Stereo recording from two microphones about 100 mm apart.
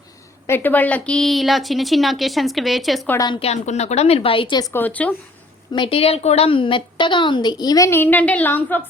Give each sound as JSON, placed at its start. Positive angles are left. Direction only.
{"t": 0.4, "sound": "a woman's voice", "side_deg": 20}
{"t": 3.4, "sound": "speech", "side_deg": 90}
{"t": 4.7, "sound": "a woman's voice", "side_deg": 15}
{"t": 5.7, "sound": "a woman's voice", "side_deg": 50}
{"t": 6.0, "sound": "a woman's voice", "side_deg": 85}
{"t": 7.9, "sound": "a woman's voice", "side_deg": 20}